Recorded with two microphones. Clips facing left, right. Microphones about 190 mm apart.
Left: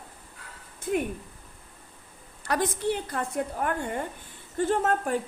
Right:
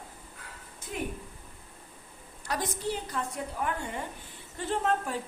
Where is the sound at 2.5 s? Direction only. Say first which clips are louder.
Left 6 dB; 60° left (ahead or behind).